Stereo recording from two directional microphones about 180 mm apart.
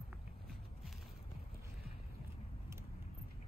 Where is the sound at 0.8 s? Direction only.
Centre (ahead or behind).